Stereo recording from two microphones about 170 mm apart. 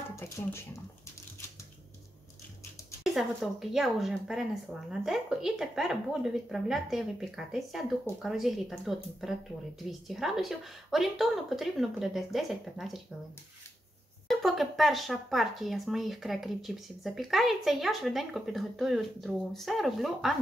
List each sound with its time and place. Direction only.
0.1 s speech: 15° left (ahead or behind)
3.0 s speech: centre (ahead or behind)
14.2 s speech: centre (ahead or behind)